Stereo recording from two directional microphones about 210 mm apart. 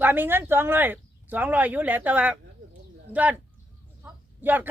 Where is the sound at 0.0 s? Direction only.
10° right (ahead or behind).